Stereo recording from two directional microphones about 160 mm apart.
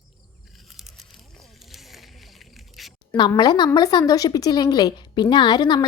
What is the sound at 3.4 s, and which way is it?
Speech, 25° left (ahead or behind).